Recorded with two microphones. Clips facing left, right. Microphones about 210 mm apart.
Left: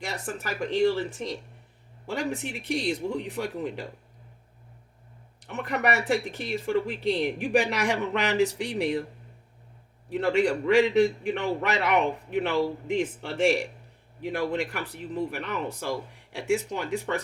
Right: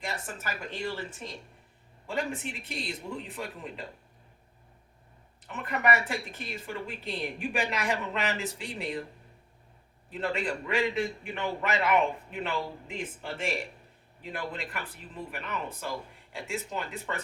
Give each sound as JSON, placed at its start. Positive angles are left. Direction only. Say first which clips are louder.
{"t": 0.0, "sound": "a man's voice", "louder": "left 4 dB", "side_deg": 75}
{"t": 2.0, "sound": "speech", "louder": "left 3 dB", "side_deg": 75}
{"t": 5.5, "sound": "a man's voice", "louder": "left 2 dB", "side_deg": 75}
{"t": 10.1, "sound": "a man's voice", "louder": "left 8 dB", "side_deg": 75}